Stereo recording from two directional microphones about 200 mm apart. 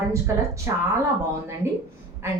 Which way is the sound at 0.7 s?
15° right (ahead or behind).